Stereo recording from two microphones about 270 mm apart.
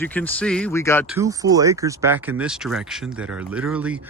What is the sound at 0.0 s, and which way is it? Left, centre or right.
Speech, centre.